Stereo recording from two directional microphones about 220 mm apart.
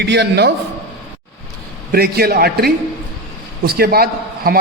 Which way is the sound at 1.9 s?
45° right (ahead or behind).